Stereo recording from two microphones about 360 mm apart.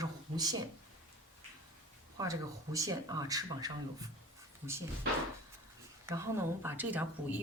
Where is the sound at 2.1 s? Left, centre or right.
Centre.